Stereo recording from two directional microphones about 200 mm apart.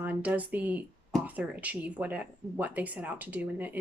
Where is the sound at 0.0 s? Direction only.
5° right (ahead or behind).